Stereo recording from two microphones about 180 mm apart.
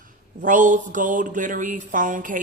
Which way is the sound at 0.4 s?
45° right (ahead or behind).